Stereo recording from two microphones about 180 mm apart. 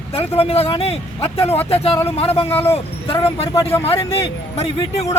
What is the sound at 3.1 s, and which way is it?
Speech, 35° left (ahead or behind).